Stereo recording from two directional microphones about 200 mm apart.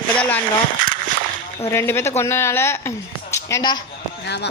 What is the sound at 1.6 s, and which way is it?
Speech, 10° left (ahead or behind).